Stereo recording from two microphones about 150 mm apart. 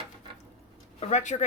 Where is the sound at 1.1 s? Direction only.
55° left (ahead or behind).